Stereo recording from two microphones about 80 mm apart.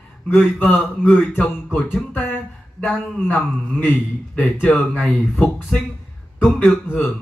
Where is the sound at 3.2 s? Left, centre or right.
Left.